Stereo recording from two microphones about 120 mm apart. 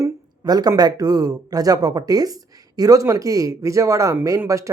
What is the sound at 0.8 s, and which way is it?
Speech, 35° right (ahead or behind).